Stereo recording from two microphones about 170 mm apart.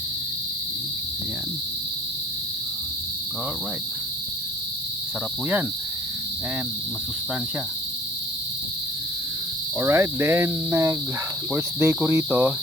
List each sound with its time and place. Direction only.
9.7 s cricket: 15° right (ahead or behind)